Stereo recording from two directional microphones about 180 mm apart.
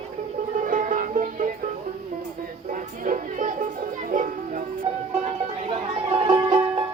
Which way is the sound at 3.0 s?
45° right (ahead or behind).